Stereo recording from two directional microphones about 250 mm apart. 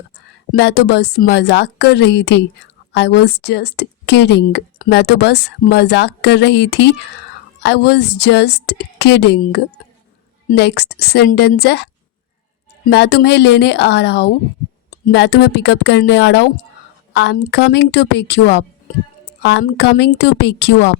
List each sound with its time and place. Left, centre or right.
0.5 s a woman's voice: left